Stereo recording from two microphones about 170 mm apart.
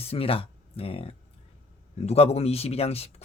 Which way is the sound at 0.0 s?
35° left (ahead or behind).